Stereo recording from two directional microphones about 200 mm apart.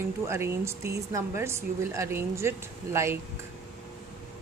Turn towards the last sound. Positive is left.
turn(degrees=-15)  # may be behind; listen again after turning